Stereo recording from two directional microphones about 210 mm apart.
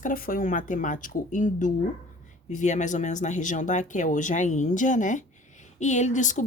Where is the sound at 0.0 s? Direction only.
40° left (ahead or behind).